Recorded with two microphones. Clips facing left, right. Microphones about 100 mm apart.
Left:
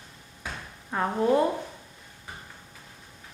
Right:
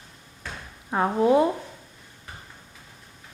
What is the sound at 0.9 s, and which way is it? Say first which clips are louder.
Speech: right 4 dB; 15° right (ahead or behind).